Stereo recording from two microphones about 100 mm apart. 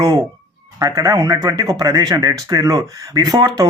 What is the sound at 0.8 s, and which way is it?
Speech, 35° right (ahead or behind).